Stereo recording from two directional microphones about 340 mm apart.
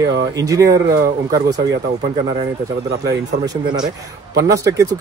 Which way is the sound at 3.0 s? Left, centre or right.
Centre.